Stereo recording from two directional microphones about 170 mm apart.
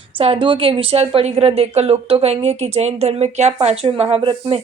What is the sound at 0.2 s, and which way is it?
A woman's voice, 30° right (ahead or behind).